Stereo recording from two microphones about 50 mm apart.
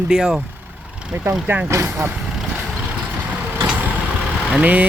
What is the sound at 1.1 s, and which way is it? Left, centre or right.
Speech, right.